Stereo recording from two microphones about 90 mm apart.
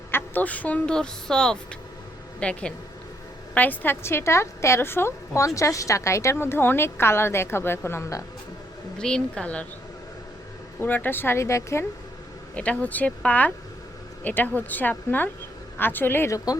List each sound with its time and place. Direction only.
0.1 s a woman's voice: 20° left (ahead or behind)
9.0 s speech: 10° left (ahead or behind)
10.8 s a woman's voice: 20° left (ahead or behind)
12.5 s a woman's voice: 15° left (ahead or behind)